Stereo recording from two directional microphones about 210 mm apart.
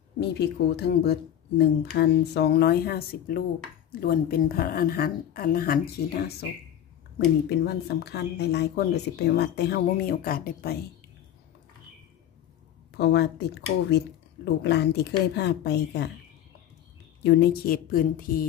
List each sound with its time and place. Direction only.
0.2 s speech: 50° left (ahead or behind)
7.4 s speech: 50° left (ahead or behind)
12.9 s speech: 50° left (ahead or behind)
17.2 s speech: 50° left (ahead or behind)